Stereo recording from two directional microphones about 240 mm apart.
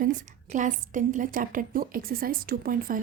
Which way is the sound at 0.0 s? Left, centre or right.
Right.